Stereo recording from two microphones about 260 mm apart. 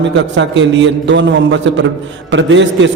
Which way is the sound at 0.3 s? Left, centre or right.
Right.